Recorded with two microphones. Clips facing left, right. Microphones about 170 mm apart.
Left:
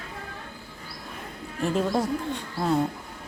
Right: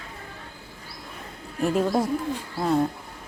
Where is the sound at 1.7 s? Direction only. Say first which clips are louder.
Right 1 dB; 5° right (ahead or behind).